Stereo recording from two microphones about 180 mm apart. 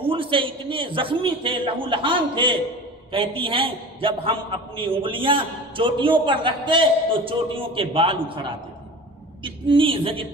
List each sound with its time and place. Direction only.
0.1 s a man's voice: 30° right (ahead or behind)